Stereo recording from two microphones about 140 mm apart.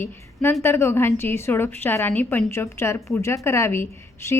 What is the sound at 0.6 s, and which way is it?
A woman's voice, 15° left (ahead or behind).